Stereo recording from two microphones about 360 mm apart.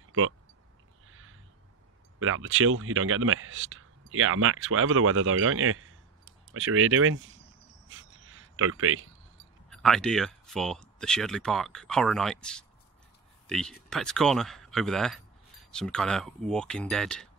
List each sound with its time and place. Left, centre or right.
2.1 s speech: right
7.9 s a sound: right
9.7 s speech: centre